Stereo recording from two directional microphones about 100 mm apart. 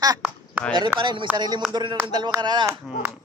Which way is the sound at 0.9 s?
55° right (ahead or behind).